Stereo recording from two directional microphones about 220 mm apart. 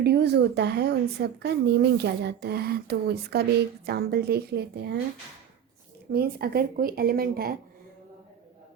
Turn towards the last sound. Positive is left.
turn(degrees=-45)  # may be behind; listen again after turning